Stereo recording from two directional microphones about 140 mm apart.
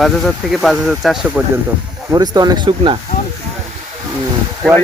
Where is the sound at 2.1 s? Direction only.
30° right (ahead or behind).